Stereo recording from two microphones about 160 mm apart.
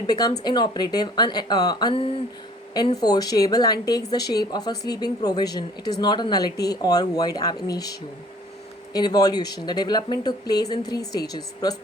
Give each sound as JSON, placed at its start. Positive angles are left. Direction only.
{"t": 0.1, "sound": "a woman's voice", "side_deg": 25}